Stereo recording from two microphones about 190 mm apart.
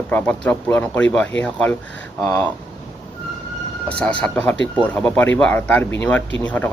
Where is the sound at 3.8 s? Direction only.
5° left (ahead or behind).